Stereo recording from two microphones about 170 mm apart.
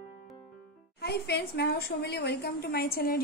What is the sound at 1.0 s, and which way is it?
A woman's voice, 70° left (ahead or behind).